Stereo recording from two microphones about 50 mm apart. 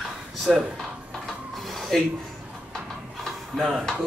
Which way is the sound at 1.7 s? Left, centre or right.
Centre.